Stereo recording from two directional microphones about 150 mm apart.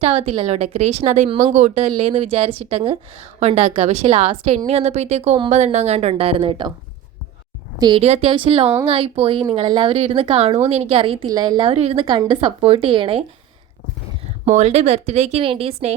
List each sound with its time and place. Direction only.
0.0 s a woman's voice: 40° right (ahead or behind)
7.8 s a woman's voice: 30° right (ahead or behind)
8.0 s a woman's voice: 40° right (ahead or behind)
11.3 s a woman's voice: 25° right (ahead or behind)
14.4 s a woman's voice: 50° right (ahead or behind)